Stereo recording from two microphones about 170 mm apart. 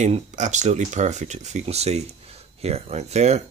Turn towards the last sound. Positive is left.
turn(degrees=-40)  # may be behind; listen again after turning